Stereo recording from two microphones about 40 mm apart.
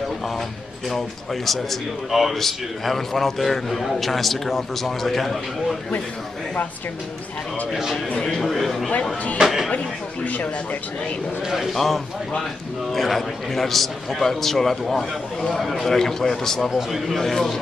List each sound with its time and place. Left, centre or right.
0.8 s a man's voice: centre
8.3 s a man's voice: centre
9.4 s a sound: centre
10.2 s speech: left
11.4 s a man's voice: centre
11.7 s a man's voice: centre